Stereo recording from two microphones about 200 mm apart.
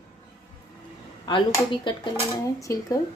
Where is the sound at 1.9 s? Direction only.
20° left (ahead or behind).